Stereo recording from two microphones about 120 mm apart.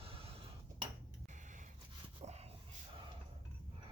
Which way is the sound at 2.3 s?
60° right (ahead or behind).